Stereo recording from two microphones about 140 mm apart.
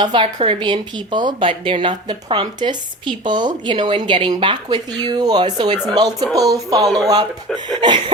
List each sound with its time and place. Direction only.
0.0 s a woman's voice: 35° right (ahead or behind)